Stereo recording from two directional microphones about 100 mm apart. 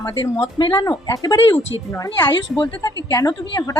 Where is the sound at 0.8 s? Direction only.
35° left (ahead or behind).